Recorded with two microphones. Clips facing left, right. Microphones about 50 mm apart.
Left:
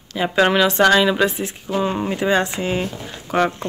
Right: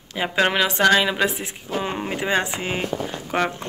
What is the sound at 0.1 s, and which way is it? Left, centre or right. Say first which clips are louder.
Speech: left 4 dB; centre.